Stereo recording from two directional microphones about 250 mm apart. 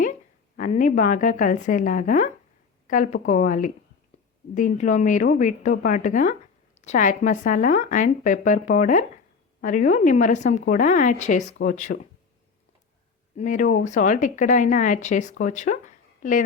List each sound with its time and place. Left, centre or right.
0.5 s speech: left
13.3 s speech: left